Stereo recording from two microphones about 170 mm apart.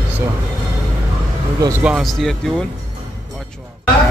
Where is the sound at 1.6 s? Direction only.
15° right (ahead or behind).